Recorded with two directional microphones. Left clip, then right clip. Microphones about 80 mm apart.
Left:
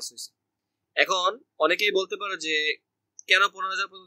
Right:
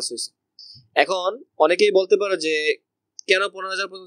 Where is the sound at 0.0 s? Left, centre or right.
Right.